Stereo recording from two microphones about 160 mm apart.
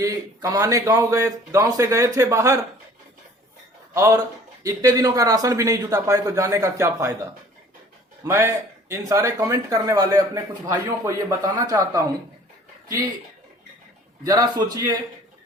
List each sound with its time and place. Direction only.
0.0 s speech: 20° right (ahead or behind)
3.9 s speech: 15° right (ahead or behind)
8.2 s speech: 15° right (ahead or behind)
14.3 s speech: 25° right (ahead or behind)